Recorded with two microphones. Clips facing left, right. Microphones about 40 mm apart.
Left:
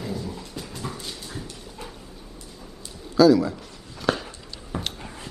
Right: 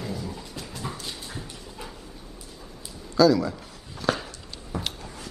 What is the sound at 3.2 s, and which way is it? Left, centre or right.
Speech, centre.